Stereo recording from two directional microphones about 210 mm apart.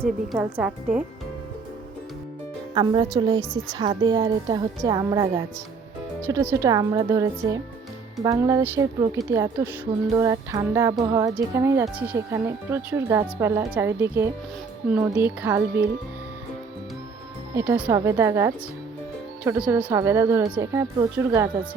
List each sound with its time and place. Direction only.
0.0 s a woman's voice: 10° right (ahead or behind)
2.7 s a woman's voice: 20° right (ahead or behind)
17.5 s speech: 10° right (ahead or behind)